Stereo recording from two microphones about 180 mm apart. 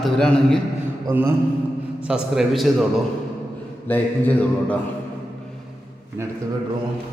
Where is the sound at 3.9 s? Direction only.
10° left (ahead or behind).